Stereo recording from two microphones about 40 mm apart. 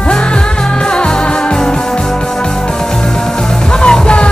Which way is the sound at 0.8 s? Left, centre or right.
Left.